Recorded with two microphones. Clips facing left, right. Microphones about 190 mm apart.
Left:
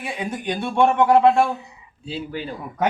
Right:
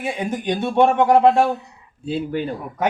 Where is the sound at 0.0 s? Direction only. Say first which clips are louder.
Right 4 dB; 25° right (ahead or behind).